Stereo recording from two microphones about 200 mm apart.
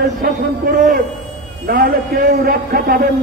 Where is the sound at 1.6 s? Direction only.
50° right (ahead or behind).